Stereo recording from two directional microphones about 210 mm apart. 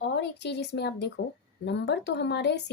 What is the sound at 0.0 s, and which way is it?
A woman's voice, 55° left (ahead or behind).